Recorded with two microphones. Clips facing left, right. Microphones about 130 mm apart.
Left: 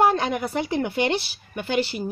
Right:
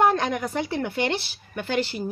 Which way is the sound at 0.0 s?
10° left (ahead or behind).